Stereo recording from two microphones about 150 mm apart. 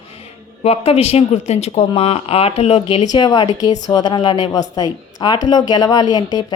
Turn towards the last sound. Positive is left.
turn(degrees=25)  # may be behind; listen again after turning